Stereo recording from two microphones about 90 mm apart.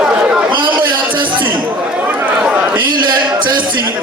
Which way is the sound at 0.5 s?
65° right (ahead or behind).